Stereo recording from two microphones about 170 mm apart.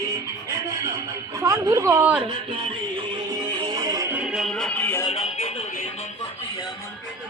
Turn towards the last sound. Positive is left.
turn(degrees=35)  # may be behind; listen again after turning